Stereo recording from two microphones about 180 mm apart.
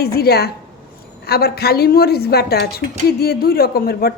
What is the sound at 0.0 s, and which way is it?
A woman's voice, 60° left (ahead or behind).